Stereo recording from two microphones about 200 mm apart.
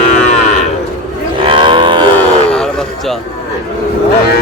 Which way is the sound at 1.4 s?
25° right (ahead or behind).